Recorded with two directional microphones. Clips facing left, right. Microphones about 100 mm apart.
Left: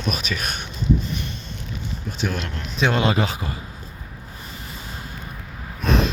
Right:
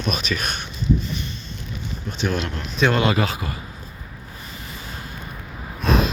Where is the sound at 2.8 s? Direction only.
20° left (ahead or behind).